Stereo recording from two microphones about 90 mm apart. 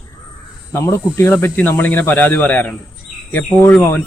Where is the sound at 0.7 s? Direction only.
30° left (ahead or behind).